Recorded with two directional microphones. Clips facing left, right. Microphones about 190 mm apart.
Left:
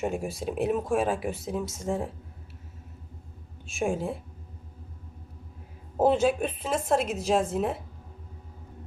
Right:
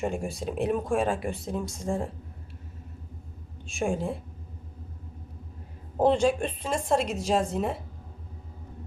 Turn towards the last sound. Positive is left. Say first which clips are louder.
# left 1 dB
turn(degrees=0)  # may be behind; listen again after turning